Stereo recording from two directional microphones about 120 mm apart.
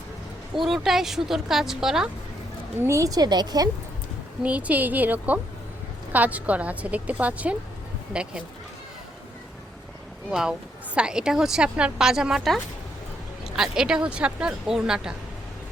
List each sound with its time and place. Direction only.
0.5 s a woman's voice: centre (ahead or behind)
2.8 s a woman's voice: 25° right (ahead or behind)
4.4 s speech: 10° right (ahead or behind)
10.9 s a woman's voice: 5° right (ahead or behind)